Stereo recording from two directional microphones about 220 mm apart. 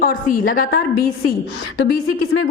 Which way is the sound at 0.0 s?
40° left (ahead or behind).